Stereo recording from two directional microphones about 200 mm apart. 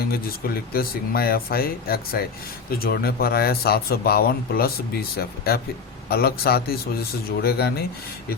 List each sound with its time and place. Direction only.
0.0 s speech: 50° left (ahead or behind)